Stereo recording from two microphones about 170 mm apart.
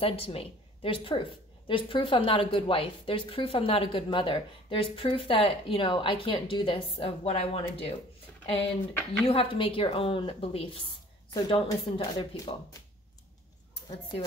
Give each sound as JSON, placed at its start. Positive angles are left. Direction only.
{"t": 0.0, "sound": "a woman's voice", "side_deg": 35}